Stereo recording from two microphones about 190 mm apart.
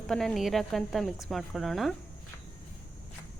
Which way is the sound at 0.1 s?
Centre (ahead or behind).